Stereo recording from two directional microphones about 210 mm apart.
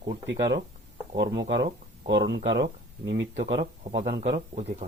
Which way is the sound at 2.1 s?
55° right (ahead or behind).